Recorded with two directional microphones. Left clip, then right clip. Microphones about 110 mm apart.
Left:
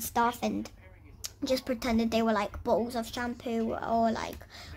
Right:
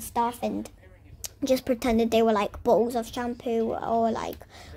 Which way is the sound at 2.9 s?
20° right (ahead or behind).